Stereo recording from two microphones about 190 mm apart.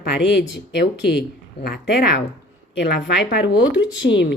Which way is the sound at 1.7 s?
60° left (ahead or behind).